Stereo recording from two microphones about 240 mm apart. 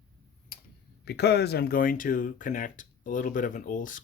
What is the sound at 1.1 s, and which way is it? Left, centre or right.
Speech, left.